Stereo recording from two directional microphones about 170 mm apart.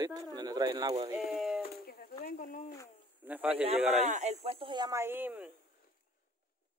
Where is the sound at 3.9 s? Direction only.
45° right (ahead or behind); by 5.5 s 10° right (ahead or behind).